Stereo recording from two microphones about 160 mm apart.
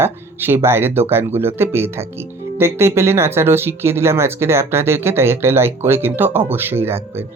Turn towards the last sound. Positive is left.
turn(degrees=-15)  # may be behind; listen again after turning